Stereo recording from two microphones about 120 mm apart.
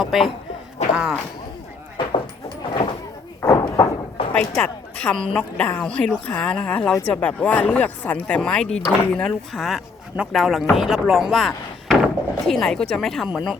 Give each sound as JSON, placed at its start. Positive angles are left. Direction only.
{"t": 0.0, "sound": "speech", "side_deg": 0}
{"t": 3.4, "sound": "a sound", "side_deg": 30}
{"t": 4.4, "sound": "a woman's voice", "side_deg": 5}